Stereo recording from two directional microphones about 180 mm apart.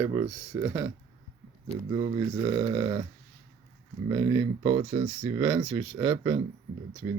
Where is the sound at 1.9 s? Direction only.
25° right (ahead or behind).